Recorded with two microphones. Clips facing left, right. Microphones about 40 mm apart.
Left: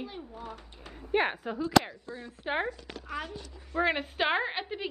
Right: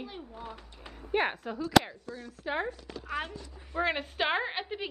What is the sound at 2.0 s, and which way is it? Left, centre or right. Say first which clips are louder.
Speech: left 1 dB; left.